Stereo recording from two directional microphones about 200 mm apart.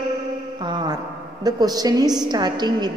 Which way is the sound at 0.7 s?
20° right (ahead or behind).